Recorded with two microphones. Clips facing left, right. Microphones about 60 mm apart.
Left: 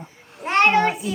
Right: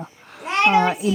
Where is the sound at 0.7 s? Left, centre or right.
Right.